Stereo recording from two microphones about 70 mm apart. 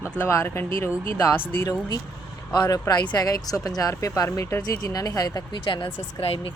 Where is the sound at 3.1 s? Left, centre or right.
Left.